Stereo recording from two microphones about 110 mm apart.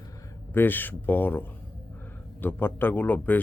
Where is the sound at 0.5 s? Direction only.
20° left (ahead or behind).